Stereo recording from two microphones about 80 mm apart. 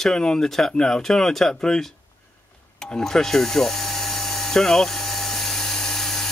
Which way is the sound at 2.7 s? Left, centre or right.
Centre.